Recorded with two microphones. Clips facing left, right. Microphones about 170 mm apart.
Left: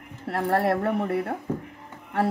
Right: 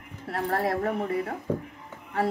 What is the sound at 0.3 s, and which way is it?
A woman's voice, 65° left (ahead or behind).